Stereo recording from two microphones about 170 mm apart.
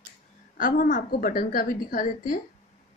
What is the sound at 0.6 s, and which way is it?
A woman's voice, 50° left (ahead or behind).